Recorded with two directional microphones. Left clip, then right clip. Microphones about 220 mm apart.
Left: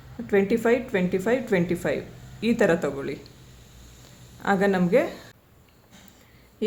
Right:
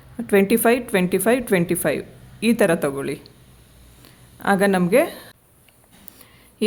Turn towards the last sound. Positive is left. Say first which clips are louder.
# right 5 dB
turn(degrees=-45)  # may be behind; listen again after turning